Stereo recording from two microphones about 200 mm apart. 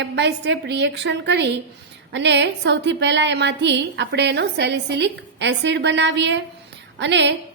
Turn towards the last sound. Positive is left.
turn(degrees=-60)  # may be behind; listen again after turning